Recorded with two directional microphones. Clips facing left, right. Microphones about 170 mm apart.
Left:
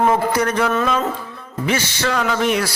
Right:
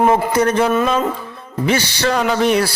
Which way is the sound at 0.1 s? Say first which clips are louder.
Right 3 dB; 25° right (ahead or behind).